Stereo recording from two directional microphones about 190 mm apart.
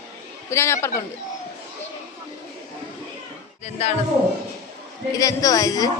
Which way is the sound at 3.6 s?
35° left (ahead or behind).